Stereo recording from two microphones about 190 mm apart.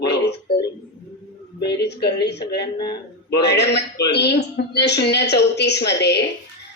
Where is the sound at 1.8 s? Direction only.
60° left (ahead or behind).